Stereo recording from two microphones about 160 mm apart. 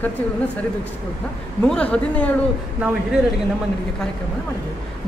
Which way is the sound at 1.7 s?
10° left (ahead or behind).